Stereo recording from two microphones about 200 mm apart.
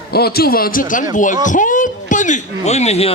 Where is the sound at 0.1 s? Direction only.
50° left (ahead or behind).